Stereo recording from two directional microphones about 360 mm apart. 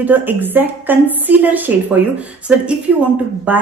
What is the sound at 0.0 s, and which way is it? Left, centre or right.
A woman's voice, centre.